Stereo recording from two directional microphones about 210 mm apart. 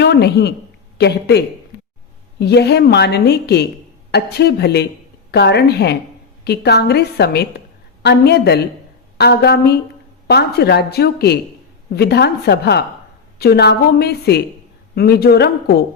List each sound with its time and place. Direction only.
0.0 s a woman's voice: 50° left (ahead or behind)